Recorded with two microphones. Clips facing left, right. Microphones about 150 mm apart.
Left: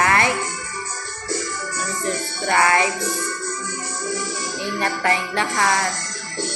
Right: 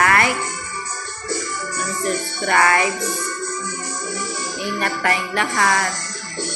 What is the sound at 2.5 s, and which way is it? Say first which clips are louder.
Speech: right 1 dB; 20° left (ahead or behind).